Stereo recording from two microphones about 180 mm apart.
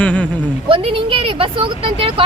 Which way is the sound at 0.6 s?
30° right (ahead or behind).